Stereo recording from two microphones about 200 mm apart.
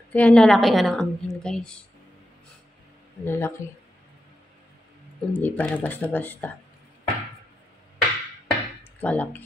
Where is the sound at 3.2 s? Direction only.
10° left (ahead or behind).